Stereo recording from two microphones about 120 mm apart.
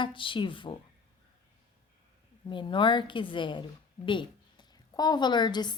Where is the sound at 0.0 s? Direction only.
45° left (ahead or behind).